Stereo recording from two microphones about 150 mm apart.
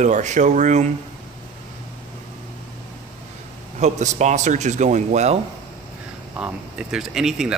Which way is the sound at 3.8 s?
50° right (ahead or behind).